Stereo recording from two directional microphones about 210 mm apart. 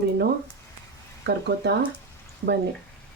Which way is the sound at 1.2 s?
55° right (ahead or behind).